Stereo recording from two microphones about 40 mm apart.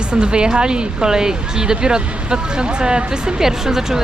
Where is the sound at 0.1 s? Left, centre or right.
Right.